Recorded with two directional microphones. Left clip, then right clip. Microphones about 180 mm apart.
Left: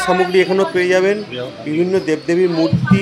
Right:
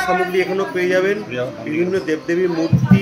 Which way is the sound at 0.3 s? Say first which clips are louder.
Left 5 dB; 50° left (ahead or behind).